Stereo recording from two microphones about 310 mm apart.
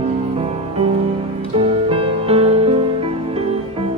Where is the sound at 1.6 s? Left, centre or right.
Centre.